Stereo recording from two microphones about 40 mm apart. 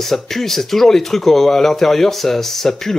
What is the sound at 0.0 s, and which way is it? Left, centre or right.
Speech, centre.